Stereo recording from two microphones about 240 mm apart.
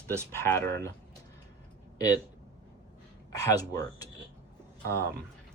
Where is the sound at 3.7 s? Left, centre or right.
Centre.